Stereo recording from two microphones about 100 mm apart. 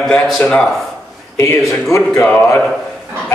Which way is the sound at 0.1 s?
10° left (ahead or behind).